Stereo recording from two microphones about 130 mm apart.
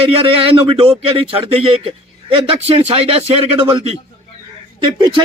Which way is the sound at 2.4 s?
50° right (ahead or behind).